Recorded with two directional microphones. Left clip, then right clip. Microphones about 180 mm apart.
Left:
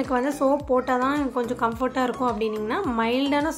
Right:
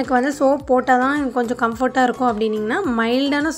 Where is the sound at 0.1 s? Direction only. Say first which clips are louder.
Right 6 dB; 30° right (ahead or behind).